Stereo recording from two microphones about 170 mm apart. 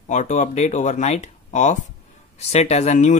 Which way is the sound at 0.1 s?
45° left (ahead or behind).